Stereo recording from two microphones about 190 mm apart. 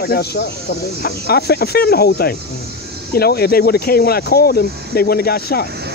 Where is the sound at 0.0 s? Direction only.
55° left (ahead or behind).